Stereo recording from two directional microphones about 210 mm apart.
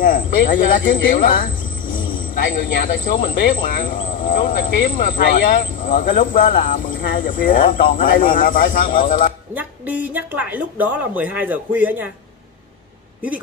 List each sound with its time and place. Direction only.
0.0 s speech: 40° left (ahead or behind)
9.5 s speech: 10° right (ahead or behind)